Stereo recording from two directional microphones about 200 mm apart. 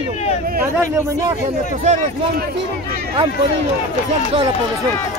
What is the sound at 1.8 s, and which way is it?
Speech, 35° right (ahead or behind).